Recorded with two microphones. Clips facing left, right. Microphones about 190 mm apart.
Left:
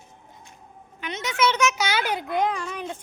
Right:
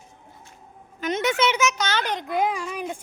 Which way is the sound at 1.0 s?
40° right (ahead or behind).